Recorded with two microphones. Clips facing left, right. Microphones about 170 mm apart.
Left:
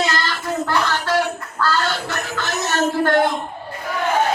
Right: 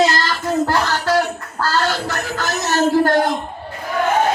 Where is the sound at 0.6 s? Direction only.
40° right (ahead or behind).